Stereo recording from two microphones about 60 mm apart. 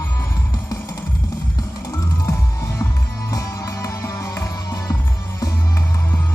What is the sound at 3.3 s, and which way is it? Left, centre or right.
Music, left.